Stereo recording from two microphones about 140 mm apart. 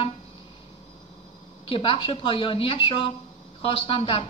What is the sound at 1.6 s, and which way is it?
A woman's voice, 40° left (ahead or behind).